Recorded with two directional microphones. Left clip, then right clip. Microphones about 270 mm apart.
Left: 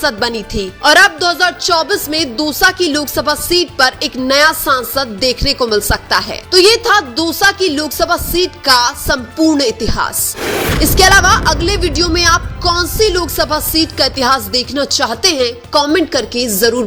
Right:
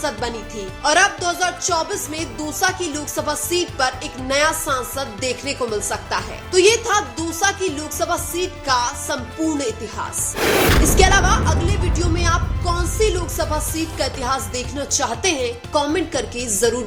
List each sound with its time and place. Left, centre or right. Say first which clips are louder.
0.0 s speech: left 9 dB; left
10.4 s music: right 1 dB; centre
10.9 s speech: left 11 dB; left